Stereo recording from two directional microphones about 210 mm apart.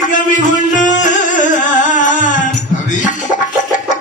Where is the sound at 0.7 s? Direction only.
35° left (ahead or behind).